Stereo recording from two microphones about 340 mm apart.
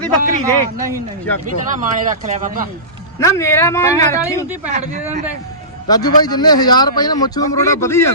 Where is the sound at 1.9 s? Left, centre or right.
Right.